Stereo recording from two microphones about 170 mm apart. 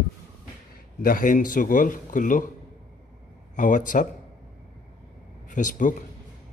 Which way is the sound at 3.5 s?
50° left (ahead or behind).